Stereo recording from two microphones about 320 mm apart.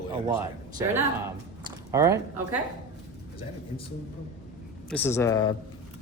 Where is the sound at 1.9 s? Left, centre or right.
Centre.